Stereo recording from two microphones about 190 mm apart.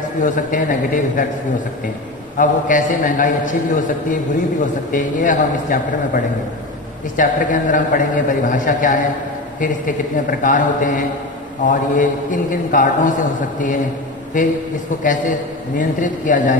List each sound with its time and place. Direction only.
0.2 s a man's voice: 45° left (ahead or behind)
2.3 s a man's voice: 45° left (ahead or behind)
10.4 s a man's voice: 45° left (ahead or behind)
15.8 s a man's voice: 45° left (ahead or behind)